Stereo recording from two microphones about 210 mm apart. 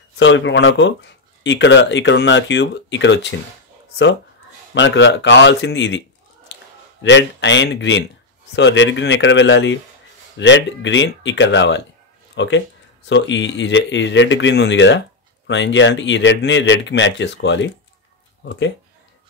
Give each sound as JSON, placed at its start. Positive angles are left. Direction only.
{"t": 0.2, "sound": "speech", "side_deg": 60}
{"t": 4.7, "sound": "a man's voice", "side_deg": 60}